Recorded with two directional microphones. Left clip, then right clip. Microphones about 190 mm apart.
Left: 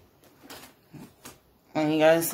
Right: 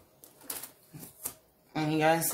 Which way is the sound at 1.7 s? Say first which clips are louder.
Left 6 dB; 40° left (ahead or behind).